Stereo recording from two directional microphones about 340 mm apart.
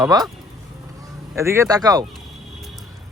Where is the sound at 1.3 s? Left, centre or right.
Centre.